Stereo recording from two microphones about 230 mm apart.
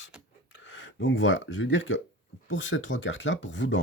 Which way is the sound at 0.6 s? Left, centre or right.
Left.